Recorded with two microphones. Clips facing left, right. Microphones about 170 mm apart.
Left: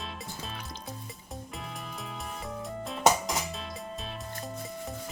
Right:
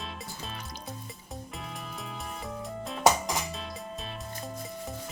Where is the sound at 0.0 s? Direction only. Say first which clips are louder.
Even; centre (ahead or behind).